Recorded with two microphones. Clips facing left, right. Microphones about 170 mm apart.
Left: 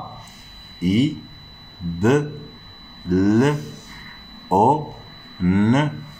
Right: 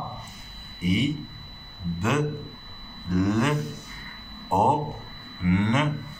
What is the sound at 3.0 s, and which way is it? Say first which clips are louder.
A man's voice: left 7 dB; 45° left (ahead or behind).